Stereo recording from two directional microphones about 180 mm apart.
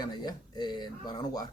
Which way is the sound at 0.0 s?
25° left (ahead or behind).